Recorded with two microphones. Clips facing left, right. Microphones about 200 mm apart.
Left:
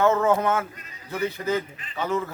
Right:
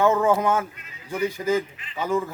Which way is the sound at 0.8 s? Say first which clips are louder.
Left 1 dB; 40° left (ahead or behind).